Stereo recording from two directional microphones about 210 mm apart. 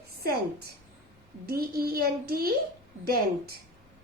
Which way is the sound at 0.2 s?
45° right (ahead or behind).